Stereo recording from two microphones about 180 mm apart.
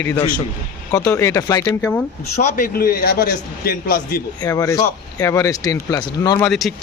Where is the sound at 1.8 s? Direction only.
10° left (ahead or behind).